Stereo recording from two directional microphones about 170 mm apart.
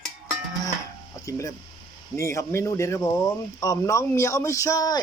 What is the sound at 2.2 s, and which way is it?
Speech, 15° left (ahead or behind).